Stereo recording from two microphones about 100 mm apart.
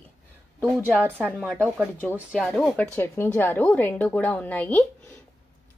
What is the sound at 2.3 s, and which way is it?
Speech, 5° left (ahead or behind).